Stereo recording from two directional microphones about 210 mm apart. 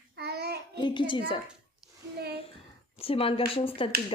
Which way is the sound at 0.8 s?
20° left (ahead or behind).